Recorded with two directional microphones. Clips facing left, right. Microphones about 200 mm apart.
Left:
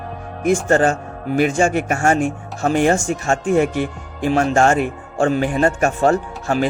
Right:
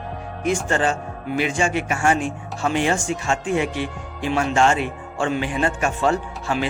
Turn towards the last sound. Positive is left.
turn(degrees=45)  # may be behind; listen again after turning